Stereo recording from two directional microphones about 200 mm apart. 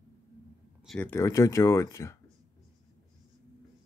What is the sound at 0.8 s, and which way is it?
Speech, 5° left (ahead or behind).